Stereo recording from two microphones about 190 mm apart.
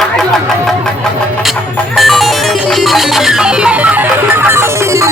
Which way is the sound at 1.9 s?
Centre (ahead or behind).